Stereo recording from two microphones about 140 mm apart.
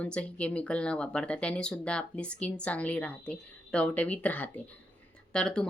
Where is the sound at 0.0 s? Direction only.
10° left (ahead or behind).